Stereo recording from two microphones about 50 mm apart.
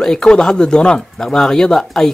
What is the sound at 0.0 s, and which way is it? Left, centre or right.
Speech, centre.